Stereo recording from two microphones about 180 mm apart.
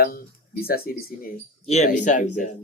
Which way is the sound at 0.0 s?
55° left (ahead or behind).